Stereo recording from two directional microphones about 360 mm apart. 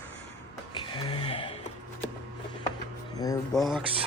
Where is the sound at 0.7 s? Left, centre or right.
Centre.